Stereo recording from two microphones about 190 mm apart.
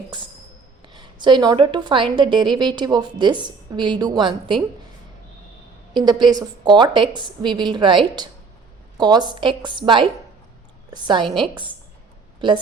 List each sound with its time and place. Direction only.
0.9 s a woman's voice: 25° right (ahead or behind)
6.0 s a woman's voice: 20° right (ahead or behind)